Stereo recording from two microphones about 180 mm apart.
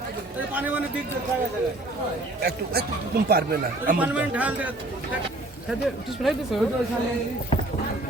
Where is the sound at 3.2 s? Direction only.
60° right (ahead or behind).